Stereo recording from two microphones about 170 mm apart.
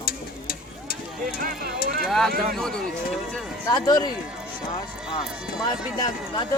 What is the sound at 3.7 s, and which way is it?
Speech, 25° left (ahead or behind).